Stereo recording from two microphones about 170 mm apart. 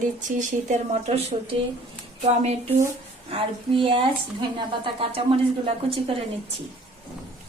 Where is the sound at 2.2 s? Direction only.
40° right (ahead or behind).